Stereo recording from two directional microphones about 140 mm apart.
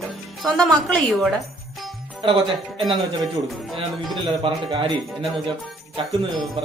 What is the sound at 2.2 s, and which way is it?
Speech, 40° right (ahead or behind).